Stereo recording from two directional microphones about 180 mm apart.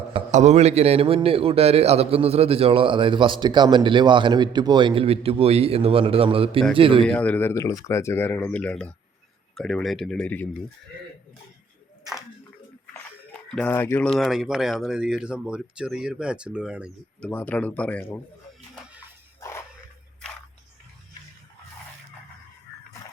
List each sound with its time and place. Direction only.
0.3 s a man's voice: 40° right (ahead or behind)
7.0 s speech: 5° left (ahead or behind)
13.5 s speech: 10° left (ahead or behind)
17.2 s speech: 10° left (ahead or behind)
19.4 s a sound: 15° left (ahead or behind)